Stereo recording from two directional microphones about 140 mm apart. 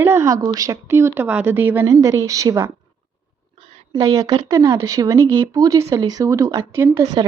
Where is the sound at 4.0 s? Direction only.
20° right (ahead or behind).